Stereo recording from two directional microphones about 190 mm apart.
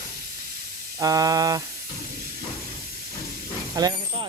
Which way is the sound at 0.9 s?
20° right (ahead or behind).